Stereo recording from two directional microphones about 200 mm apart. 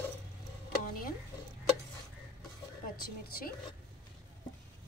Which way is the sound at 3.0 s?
45° left (ahead or behind).